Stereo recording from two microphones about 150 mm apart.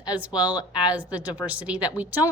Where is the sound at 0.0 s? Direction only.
10° right (ahead or behind).